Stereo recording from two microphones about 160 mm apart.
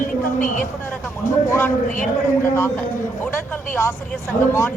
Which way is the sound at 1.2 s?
15° left (ahead or behind).